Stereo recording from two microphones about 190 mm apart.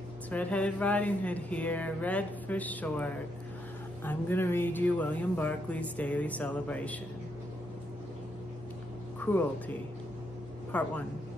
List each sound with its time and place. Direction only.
0.3 s speech: 5° left (ahead or behind)
9.2 s speech: 10° left (ahead or behind)
10.7 s speech: 10° left (ahead or behind)